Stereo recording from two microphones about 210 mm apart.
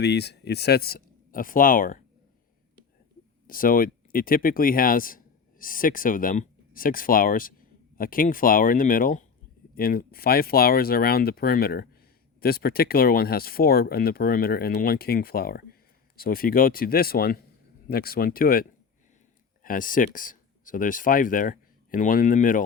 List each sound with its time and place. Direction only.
0.0 s speech: 50° left (ahead or behind)
3.4 s speech: 40° left (ahead or behind)